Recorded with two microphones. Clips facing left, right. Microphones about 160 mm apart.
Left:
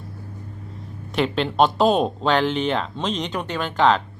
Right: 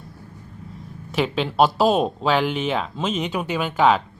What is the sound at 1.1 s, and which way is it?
Speech, centre (ahead or behind).